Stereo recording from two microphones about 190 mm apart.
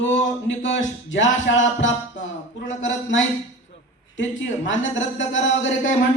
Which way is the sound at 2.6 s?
80° left.